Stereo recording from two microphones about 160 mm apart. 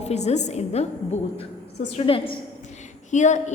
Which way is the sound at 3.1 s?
50° left (ahead or behind).